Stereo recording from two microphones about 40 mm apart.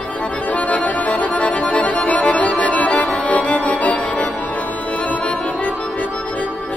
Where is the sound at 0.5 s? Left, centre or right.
Left.